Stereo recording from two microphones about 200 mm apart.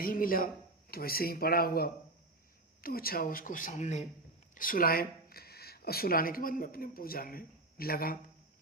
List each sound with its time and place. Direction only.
0.0 s speech: 45° left (ahead or behind)